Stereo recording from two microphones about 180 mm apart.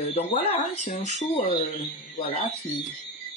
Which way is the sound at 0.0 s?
35° left (ahead or behind).